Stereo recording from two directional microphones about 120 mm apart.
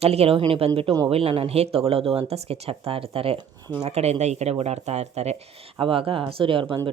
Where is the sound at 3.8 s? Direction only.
60° right (ahead or behind).